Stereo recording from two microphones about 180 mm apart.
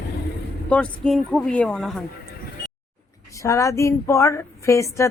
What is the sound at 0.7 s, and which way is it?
Speech, 5° left (ahead or behind).